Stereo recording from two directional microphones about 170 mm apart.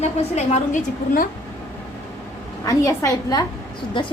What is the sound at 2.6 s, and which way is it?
Speech, 20° left (ahead or behind).